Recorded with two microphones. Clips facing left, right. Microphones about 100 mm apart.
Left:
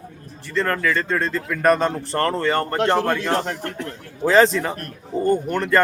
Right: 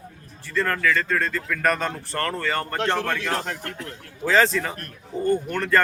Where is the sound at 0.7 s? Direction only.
25° left (ahead or behind).